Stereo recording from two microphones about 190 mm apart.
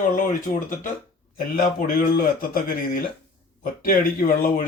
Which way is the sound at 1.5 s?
50° left (ahead or behind).